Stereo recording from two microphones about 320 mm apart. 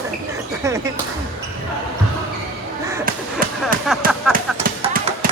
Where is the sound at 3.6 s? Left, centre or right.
Centre.